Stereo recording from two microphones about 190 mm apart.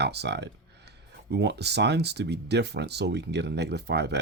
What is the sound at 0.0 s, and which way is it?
Speech, 60° right (ahead or behind).